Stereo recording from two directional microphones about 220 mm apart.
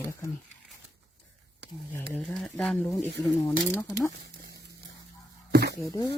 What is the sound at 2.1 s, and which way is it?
Speech, centre (ahead or behind).